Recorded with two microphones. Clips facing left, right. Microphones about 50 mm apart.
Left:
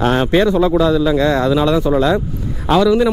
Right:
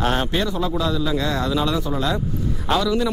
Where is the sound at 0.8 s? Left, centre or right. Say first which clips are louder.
Left 9 dB; centre.